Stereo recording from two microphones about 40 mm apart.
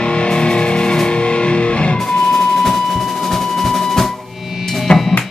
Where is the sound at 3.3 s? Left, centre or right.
Centre.